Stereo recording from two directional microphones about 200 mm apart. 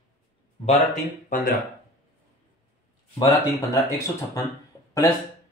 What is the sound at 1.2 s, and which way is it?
Speech, 45° left (ahead or behind).